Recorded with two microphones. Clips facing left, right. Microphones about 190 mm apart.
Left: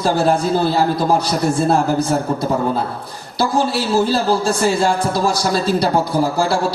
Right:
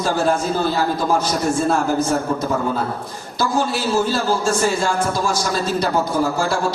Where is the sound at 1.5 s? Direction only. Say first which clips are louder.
Left 3 dB; 35° left (ahead or behind).